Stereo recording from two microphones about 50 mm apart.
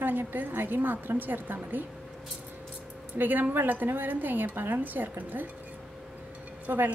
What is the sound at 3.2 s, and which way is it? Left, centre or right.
A woman's voice, right.